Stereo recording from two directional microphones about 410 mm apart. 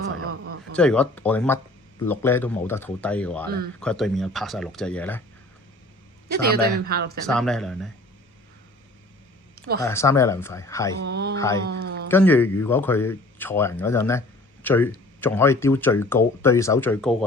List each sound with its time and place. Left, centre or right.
0.2 s a sound: right
0.8 s speech: centre
6.3 s speech: right
7.3 s speech: centre
9.6 s a sound: right
9.8 s speech: centre
11.0 s speech: right
11.3 s speech: centre
11.7 s speech: right
12.1 s speech: centre